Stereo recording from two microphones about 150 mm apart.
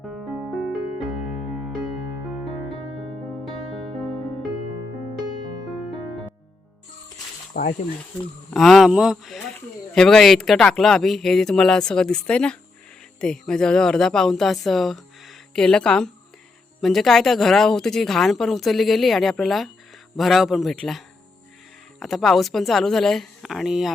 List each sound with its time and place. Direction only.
0.5 s music: centre (ahead or behind)
7.6 s speech: 90° left
8.4 s speech: centre (ahead or behind)
22.0 s speech: centre (ahead or behind)